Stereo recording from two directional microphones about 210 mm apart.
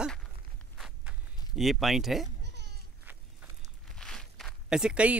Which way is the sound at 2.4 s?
55° right (ahead or behind).